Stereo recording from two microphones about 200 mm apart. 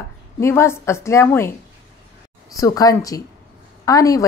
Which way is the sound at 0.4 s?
15° left (ahead or behind).